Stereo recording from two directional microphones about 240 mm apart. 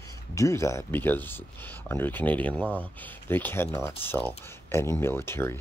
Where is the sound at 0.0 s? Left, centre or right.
Centre.